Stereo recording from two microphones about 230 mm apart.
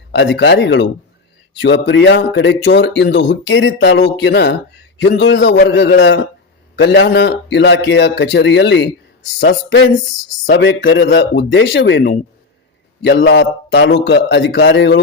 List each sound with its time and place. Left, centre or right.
0.1 s speech: left